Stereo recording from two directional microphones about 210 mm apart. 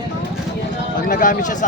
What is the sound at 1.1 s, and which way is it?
Speech, 40° left (ahead or behind).